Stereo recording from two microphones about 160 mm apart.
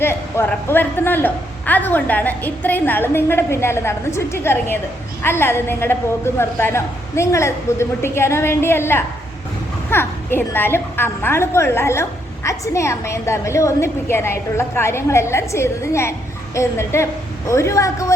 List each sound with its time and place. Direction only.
0.0 s a woman's voice: 15° left (ahead or behind)